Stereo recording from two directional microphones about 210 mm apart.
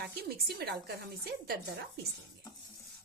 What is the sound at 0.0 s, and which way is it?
Speech, 50° right (ahead or behind).